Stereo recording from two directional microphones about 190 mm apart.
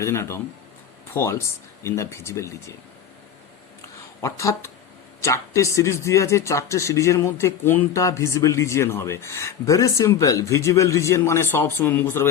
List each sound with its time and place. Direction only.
0.0 s speech: 15° left (ahead or behind)
4.2 s speech: 15° left (ahead or behind)